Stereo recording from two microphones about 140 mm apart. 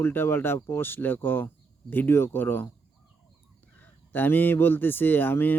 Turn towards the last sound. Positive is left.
turn(degrees=15)  # may be behind; listen again after turning